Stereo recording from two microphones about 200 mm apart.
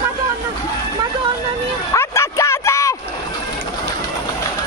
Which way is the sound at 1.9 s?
15° left (ahead or behind).